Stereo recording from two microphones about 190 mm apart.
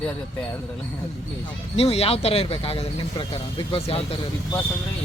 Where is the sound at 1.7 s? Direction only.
30° left (ahead or behind).